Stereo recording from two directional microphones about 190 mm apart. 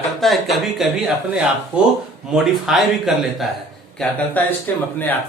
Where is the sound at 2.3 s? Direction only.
Centre (ahead or behind).